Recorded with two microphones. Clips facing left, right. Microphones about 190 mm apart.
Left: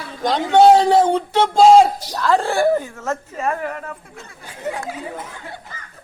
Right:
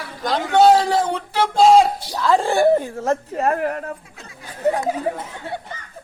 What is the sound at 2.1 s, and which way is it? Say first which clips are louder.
Speech: right 1 dB; 15° right (ahead or behind).